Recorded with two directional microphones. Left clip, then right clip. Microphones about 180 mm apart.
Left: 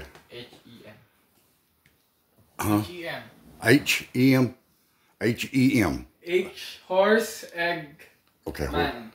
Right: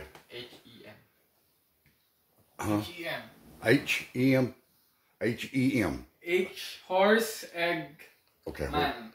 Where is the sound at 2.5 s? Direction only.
50° left (ahead or behind).